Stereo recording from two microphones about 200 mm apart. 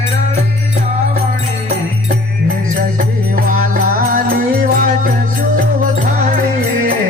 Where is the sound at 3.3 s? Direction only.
45° right (ahead or behind).